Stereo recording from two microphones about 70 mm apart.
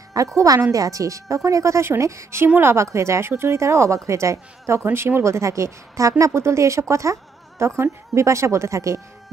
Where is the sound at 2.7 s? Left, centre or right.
Right.